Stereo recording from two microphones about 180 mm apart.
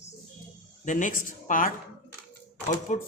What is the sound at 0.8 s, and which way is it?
Speech, 45° left (ahead or behind).